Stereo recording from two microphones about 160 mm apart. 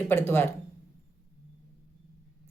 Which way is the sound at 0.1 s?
15° left (ahead or behind).